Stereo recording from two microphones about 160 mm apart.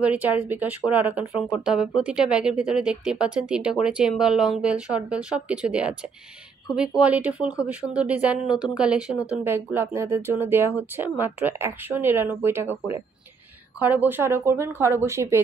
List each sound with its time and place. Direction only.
0.0 s speech: 10° right (ahead or behind)
7.0 s speech: 10° right (ahead or behind)
13.8 s speech: 10° right (ahead or behind)